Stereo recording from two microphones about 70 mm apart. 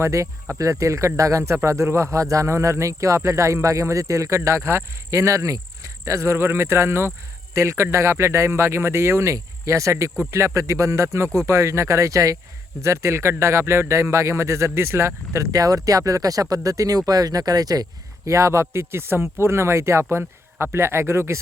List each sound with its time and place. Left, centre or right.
0.0 s speech: right
18.3 s speech: right